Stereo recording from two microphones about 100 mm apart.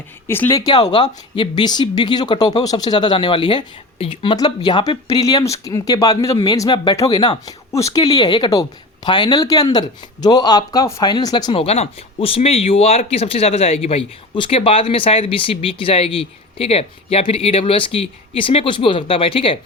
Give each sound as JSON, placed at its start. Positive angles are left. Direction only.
{"t": 0.5, "sound": "speech", "side_deg": 40}
{"t": 4.4, "sound": "speech", "side_deg": 45}
{"t": 6.9, "sound": "speech", "side_deg": 30}
{"t": 7.2, "sound": "speech", "side_deg": 45}
{"t": 7.7, "sound": "speech", "side_deg": 30}
{"t": 8.1, "sound": "speech", "side_deg": 50}
{"t": 11.5, "sound": "speech", "side_deg": 85}
{"t": 14.3, "sound": "speech", "side_deg": 60}